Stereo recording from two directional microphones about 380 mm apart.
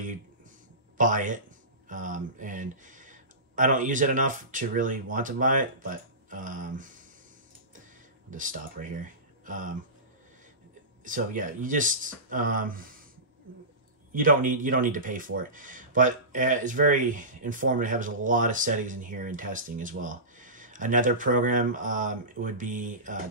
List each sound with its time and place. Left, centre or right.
0.9 s speech: centre
8.3 s speech: right
11.1 s speech: right
14.1 s speech: right